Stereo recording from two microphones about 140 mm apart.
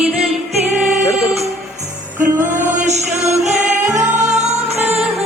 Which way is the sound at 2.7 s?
55° right (ahead or behind).